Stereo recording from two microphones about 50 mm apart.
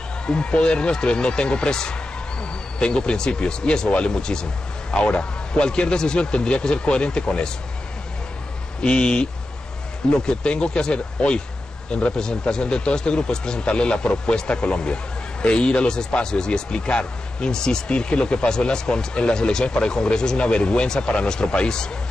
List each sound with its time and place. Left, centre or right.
0.3 s speech: left
8.8 s speech: left